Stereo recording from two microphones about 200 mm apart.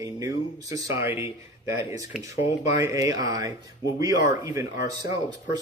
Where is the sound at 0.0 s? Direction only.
15° right (ahead or behind).